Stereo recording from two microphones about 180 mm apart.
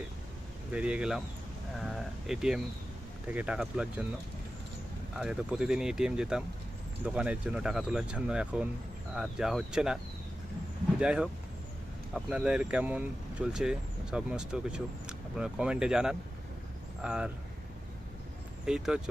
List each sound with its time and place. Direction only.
0.7 s speech: 5° right (ahead or behind)
1.7 s sheep: centre (ahead or behind)
3.3 s speech: 5° right (ahead or behind)
5.1 s speech: 5° right (ahead or behind)
11.0 s speech: 5° right (ahead or behind)
18.6 s speech: 5° right (ahead or behind)